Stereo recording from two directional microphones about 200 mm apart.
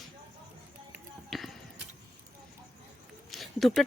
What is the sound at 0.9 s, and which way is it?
Music, centre (ahead or behind).